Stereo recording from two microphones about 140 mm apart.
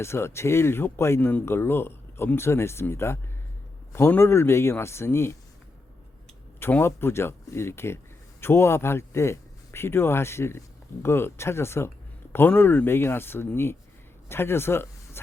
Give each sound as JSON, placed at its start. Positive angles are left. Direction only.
{"t": 0.0, "sound": "speech", "side_deg": 20}
{"t": 6.6, "sound": "speech", "side_deg": 15}